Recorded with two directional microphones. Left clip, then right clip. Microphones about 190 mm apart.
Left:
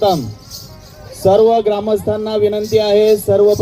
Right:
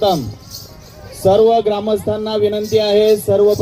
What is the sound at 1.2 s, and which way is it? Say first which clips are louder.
Music: left 1 dB; 35° right (ahead or behind).